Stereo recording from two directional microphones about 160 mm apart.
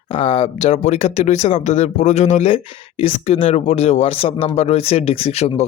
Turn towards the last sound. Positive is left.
turn(degrees=40)  # may be behind; listen again after turning